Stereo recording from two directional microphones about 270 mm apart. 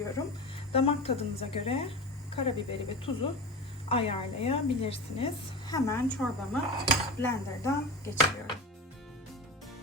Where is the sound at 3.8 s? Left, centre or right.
Left.